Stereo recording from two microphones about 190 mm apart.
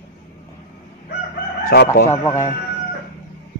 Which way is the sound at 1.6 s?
55° left (ahead or behind).